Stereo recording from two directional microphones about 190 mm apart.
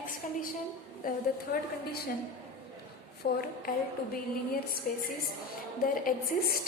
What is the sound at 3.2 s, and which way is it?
Speech, 55° left (ahead or behind).